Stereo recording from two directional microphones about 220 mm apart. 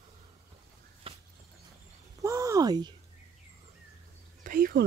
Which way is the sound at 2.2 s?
15° right (ahead or behind).